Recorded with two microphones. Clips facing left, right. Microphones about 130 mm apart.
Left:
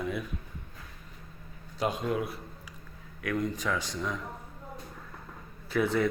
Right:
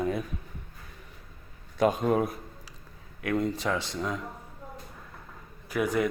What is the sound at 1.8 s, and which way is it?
Speech, 50° right (ahead or behind).